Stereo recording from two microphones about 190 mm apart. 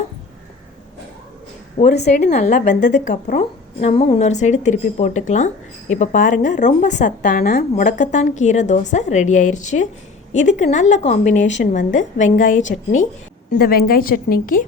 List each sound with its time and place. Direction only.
1.8 s a woman's voice: 40° left (ahead or behind)